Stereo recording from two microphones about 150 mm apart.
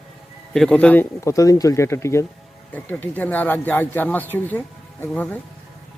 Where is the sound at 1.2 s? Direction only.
20° left (ahead or behind).